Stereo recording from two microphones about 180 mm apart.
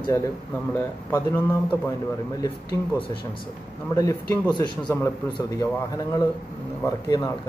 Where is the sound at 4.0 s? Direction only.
20° left (ahead or behind).